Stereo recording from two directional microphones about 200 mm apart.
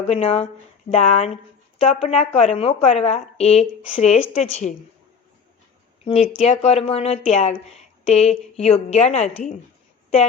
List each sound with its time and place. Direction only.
0.1 s speech: 30° left (ahead or behind)
6.1 s speech: 30° left (ahead or behind)